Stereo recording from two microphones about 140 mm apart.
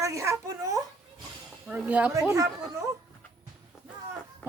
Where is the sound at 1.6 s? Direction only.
10° right (ahead or behind).